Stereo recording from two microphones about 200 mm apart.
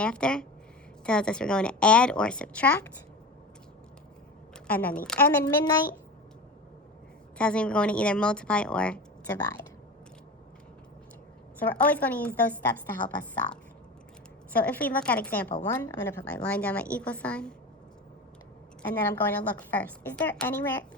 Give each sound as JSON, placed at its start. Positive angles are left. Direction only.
{"t": 0.0, "sound": "speech", "side_deg": 5}
{"t": 4.7, "sound": "a woman's voice", "side_deg": 10}
{"t": 7.3, "sound": "speech", "side_deg": 5}
{"t": 11.6, "sound": "a woman's voice", "side_deg": 5}
{"t": 13.0, "sound": "a woman's voice", "side_deg": 25}
{"t": 14.5, "sound": "a woman's voice", "side_deg": 10}
{"t": 19.1, "sound": "a woman's voice", "side_deg": 10}